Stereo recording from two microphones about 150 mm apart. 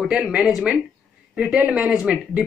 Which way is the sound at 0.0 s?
5° right (ahead or behind).